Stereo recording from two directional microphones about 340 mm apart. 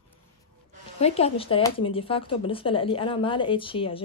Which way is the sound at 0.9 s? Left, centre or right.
Centre.